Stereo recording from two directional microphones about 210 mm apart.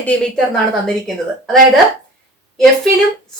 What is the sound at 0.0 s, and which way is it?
A woman's voice, 5° left (ahead or behind).